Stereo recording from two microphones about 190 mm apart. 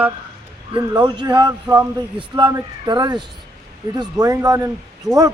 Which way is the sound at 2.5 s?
20° right (ahead or behind).